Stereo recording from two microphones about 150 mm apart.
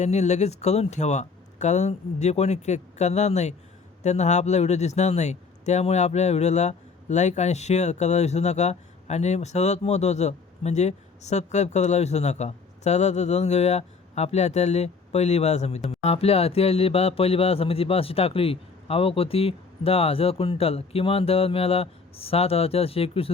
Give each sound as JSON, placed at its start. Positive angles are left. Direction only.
{"t": 0.0, "sound": "a man's voice", "side_deg": 50}
{"t": 15.9, "sound": "music", "side_deg": 45}